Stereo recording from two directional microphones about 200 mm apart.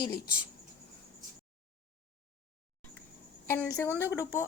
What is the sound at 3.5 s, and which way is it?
Speech, 10° left (ahead or behind).